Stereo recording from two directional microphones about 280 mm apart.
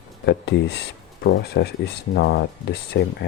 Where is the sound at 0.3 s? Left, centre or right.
Left.